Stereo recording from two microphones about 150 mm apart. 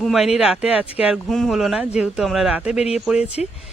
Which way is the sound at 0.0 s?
Centre (ahead or behind).